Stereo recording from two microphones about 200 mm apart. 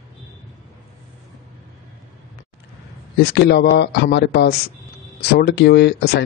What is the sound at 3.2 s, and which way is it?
Speech, 55° left (ahead or behind).